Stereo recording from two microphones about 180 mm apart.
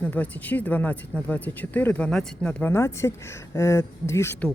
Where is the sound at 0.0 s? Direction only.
10° left (ahead or behind).